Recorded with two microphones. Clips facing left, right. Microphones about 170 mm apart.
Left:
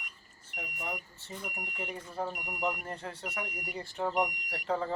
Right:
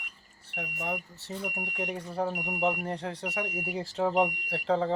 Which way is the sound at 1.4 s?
60° right (ahead or behind).